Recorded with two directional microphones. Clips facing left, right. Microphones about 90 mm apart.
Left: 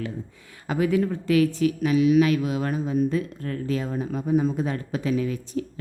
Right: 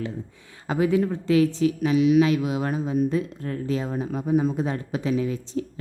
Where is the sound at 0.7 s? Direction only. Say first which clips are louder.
Right 1 dB; 25° right (ahead or behind).